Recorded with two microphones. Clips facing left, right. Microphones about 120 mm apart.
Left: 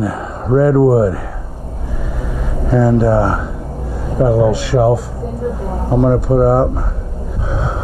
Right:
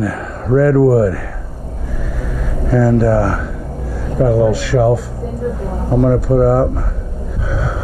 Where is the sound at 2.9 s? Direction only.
Centre (ahead or behind).